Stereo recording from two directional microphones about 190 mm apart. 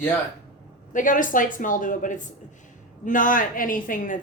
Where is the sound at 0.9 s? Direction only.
45° left (ahead or behind).